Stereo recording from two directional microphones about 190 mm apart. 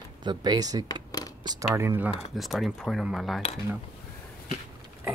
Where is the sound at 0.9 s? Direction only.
20° left (ahead or behind).